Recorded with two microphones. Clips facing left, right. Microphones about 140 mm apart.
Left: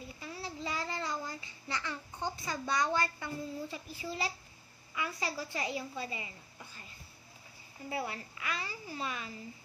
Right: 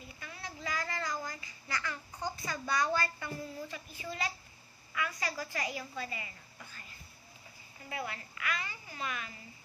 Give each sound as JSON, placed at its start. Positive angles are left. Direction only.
{"t": 0.2, "sound": "a sound", "side_deg": 30}
{"t": 4.9, "sound": "a woman's voice", "side_deg": 25}
{"t": 7.9, "sound": "a child's voice", "side_deg": 30}